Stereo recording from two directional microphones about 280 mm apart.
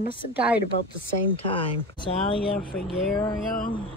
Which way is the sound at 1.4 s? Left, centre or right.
Centre.